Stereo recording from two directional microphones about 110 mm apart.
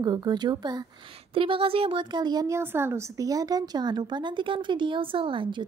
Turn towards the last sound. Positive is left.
turn(degrees=-50)  # may be behind; listen again after turning